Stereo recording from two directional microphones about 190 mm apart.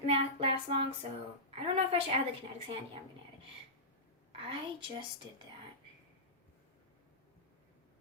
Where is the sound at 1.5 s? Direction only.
30° right (ahead or behind).